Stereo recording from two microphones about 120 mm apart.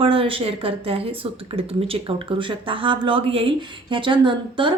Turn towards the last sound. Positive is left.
turn(degrees=-45)  # may be behind; listen again after turning